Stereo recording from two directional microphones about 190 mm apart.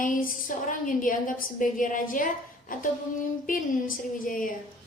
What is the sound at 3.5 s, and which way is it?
A woman's voice, 45° left (ahead or behind).